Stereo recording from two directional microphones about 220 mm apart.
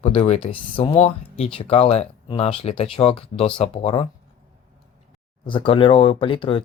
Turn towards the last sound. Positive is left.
turn(degrees=25)  # may be behind; listen again after turning